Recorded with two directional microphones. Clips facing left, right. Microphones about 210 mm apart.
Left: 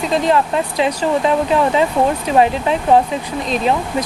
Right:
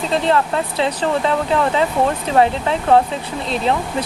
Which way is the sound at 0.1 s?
15° left (ahead or behind).